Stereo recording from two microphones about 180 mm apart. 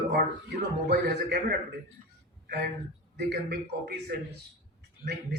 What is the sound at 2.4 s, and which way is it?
A man's voice, 60° right (ahead or behind).